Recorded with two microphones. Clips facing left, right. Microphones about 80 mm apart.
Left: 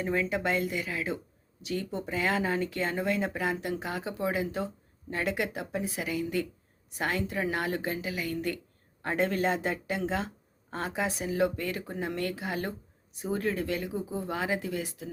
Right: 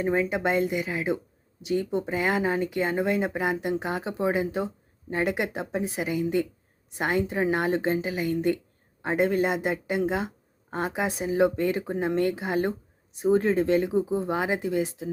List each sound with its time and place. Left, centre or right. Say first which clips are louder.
0.0 s speech: right 4 dB; right